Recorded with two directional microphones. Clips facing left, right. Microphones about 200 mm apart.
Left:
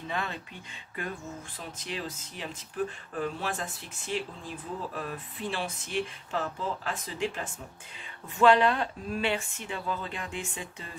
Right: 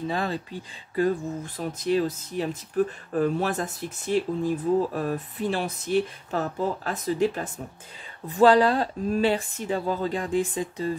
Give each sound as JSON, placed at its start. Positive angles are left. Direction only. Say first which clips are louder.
{"t": 0.0, "sound": "speech", "louder": "right 7 dB", "side_deg": -35}